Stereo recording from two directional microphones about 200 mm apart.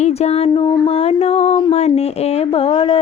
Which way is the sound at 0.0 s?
30° left (ahead or behind).